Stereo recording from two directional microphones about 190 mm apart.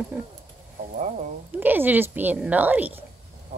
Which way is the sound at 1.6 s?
10° right (ahead or behind).